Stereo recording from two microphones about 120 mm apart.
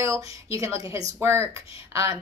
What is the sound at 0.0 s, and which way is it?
Speech, 25° right (ahead or behind).